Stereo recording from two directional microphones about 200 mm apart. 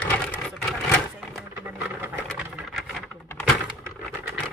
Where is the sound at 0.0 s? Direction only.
5° left (ahead or behind).